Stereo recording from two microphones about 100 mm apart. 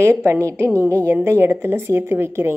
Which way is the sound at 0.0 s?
25° right (ahead or behind).